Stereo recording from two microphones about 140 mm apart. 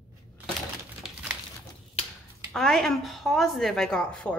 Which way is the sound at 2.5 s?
5° left (ahead or behind).